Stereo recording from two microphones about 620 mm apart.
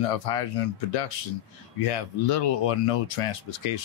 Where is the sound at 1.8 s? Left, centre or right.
Left.